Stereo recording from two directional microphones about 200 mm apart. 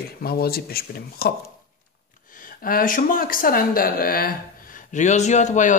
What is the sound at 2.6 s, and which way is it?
A man's voice, 45° left (ahead or behind).